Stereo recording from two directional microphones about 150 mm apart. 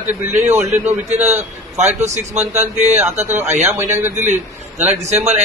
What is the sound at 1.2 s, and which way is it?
A man's voice, 50° right (ahead or behind).